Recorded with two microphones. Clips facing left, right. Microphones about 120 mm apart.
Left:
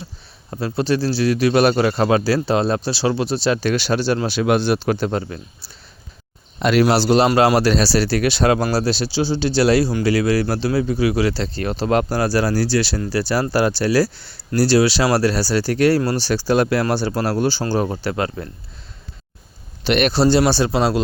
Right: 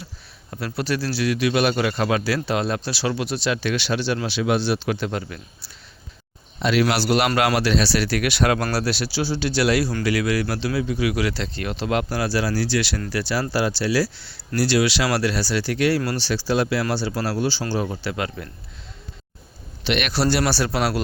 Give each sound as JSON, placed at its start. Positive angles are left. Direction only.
{"t": 0.5, "sound": "speech", "side_deg": 25}
{"t": 6.6, "sound": "speech", "side_deg": 50}
{"t": 6.8, "sound": "speech", "side_deg": 30}
{"t": 19.8, "sound": "a man's voice", "side_deg": 40}
{"t": 20.1, "sound": "speech", "side_deg": 25}